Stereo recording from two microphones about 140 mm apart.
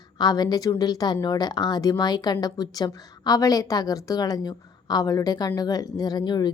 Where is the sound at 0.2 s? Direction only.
30° left (ahead or behind).